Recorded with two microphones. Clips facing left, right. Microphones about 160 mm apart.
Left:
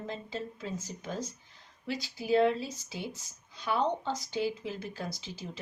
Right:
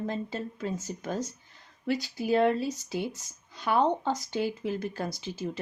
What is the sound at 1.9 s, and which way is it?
Speech, 50° right (ahead or behind).